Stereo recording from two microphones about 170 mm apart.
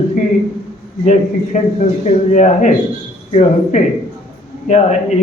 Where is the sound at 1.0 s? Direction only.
45° left (ahead or behind).